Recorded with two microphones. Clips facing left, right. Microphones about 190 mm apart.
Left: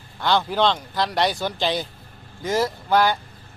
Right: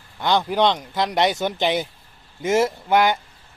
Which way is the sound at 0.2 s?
15° right (ahead or behind).